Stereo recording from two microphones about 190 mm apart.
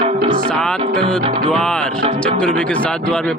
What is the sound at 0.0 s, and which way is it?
Music, 30° right (ahead or behind).